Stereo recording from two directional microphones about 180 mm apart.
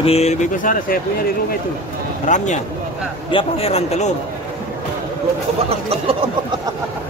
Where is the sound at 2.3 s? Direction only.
45° left (ahead or behind).